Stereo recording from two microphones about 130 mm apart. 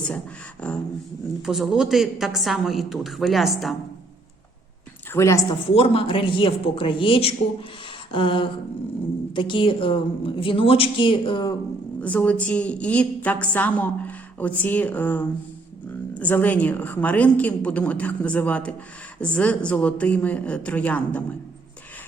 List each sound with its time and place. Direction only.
0.6 s a woman's voice: 10° left (ahead or behind)
1.4 s a woman's voice: 5° right (ahead or behind)
5.1 s speech: 20° left (ahead or behind)
5.7 s a woman's voice: 45° left (ahead or behind)
11.9 s a woman's voice: 10° left (ahead or behind)